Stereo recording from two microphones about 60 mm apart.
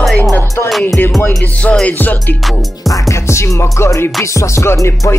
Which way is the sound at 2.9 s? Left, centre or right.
Left.